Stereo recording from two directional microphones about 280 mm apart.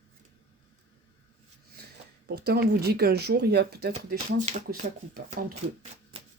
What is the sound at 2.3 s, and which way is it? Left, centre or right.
Speech, right.